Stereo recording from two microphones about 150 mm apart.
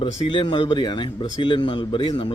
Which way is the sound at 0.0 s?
35° left (ahead or behind).